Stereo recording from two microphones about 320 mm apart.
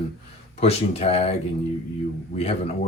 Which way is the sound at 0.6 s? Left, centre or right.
Centre.